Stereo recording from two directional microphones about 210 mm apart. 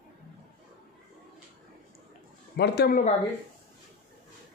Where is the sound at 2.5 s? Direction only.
50° left (ahead or behind).